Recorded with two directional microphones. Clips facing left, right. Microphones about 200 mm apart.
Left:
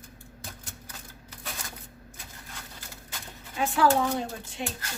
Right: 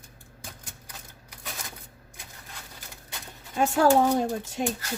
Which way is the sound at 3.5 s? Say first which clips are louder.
Right 3 dB; 45° right (ahead or behind).